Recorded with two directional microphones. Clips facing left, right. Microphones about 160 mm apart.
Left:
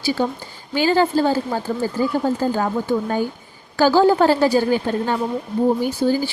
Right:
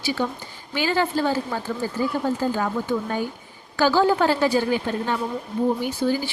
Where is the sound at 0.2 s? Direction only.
35° left (ahead or behind).